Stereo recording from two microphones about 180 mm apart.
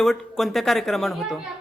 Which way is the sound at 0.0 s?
Centre (ahead or behind).